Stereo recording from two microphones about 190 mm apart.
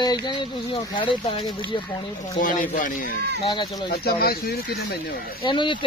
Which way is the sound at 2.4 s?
45° left (ahead or behind).